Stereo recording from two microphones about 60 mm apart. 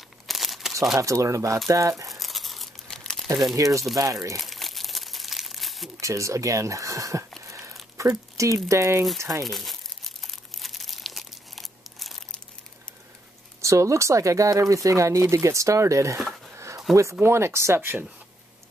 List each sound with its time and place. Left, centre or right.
0.3 s crumpling: centre
0.9 s speech: right
2.0 s crumpling: centre
2.9 s crumpling: centre
3.5 s speech: right
4.4 s crumpling: centre
5.9 s speech: right
7.4 s a sound: right
8.0 s speech: right
9.4 s speech: centre
10.2 s crumpling: centre
13.6 s speech: right
16.9 s speech: centre
17.2 s speech: right